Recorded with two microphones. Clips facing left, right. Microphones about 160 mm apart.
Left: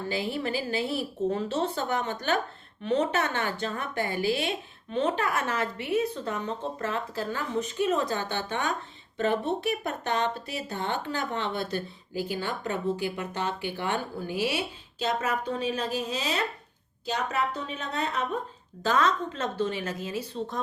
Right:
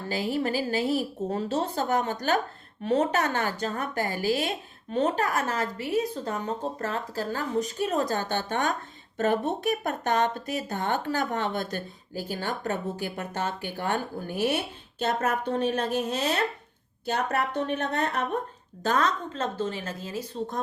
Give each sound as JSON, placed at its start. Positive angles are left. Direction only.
{"t": 0.1, "sound": "a woman's voice", "side_deg": -40}
{"t": 20.0, "sound": "a woman's voice", "side_deg": -35}